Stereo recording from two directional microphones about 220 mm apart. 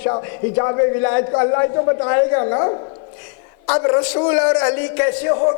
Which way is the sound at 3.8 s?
20° left (ahead or behind).